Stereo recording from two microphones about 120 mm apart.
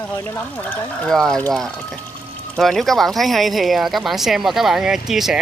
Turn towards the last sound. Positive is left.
turn(degrees=-5)  # may be behind; listen again after turning